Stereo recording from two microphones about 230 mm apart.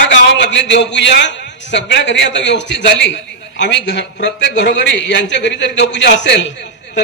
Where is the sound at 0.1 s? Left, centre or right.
Left.